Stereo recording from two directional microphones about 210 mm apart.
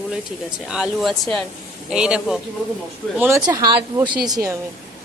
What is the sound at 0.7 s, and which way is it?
A woman's voice, centre (ahead or behind).